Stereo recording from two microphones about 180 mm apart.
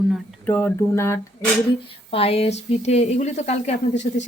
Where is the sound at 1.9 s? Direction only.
30° left (ahead or behind).